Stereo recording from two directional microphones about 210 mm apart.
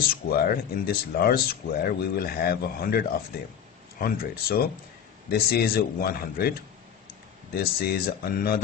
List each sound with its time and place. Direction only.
0.1 s speech: 45° left (ahead or behind)
7.5 s speech: 45° left (ahead or behind)